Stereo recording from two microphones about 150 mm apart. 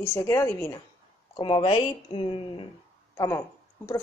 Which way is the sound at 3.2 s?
20° left (ahead or behind).